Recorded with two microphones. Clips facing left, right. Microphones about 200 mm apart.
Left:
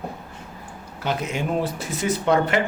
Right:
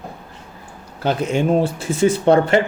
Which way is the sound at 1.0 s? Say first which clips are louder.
Right 7 dB; 30° right (ahead or behind).